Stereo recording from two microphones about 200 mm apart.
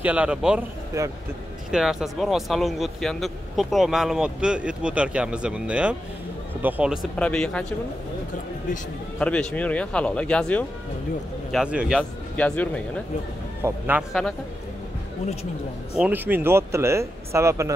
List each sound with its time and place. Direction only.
0.0 s speech: 5° right (ahead or behind)
0.9 s speech: 15° right (ahead or behind)
1.7 s speech: centre (ahead or behind)
9.2 s speech: 5° left (ahead or behind)
12.0 s speech: 5° left (ahead or behind)
13.6 s speech: 10° right (ahead or behind)
16.0 s speech: 10° right (ahead or behind)